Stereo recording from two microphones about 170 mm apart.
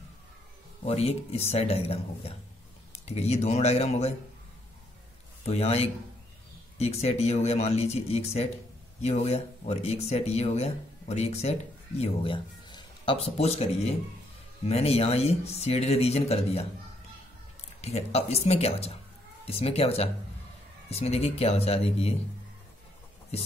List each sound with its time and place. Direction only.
0.8 s speech: 35° left (ahead or behind)
5.4 s speech: 40° left (ahead or behind)
17.8 s speech: 40° left (ahead or behind)